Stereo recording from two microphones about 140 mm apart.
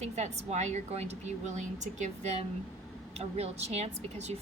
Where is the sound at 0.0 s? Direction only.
55° right (ahead or behind).